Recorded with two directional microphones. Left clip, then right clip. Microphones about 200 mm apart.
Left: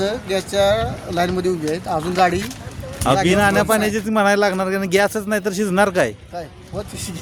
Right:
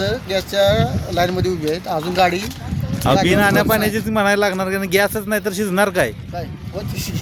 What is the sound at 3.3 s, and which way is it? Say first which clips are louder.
Speech: even; centre (ahead or behind).